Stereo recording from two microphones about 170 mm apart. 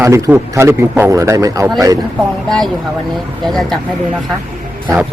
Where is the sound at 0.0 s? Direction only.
15° right (ahead or behind).